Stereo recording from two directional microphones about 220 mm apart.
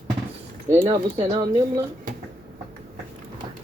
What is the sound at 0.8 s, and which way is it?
Speech, 20° right (ahead or behind).